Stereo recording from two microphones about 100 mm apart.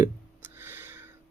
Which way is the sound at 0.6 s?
20° right (ahead or behind).